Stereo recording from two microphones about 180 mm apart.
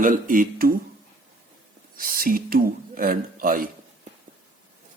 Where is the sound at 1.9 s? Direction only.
50° right (ahead or behind).